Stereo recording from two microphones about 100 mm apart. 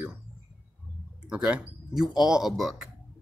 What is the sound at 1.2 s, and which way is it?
Speech, 10° right (ahead or behind).